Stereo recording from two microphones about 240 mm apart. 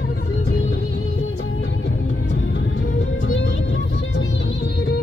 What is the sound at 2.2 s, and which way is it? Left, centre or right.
Music, left.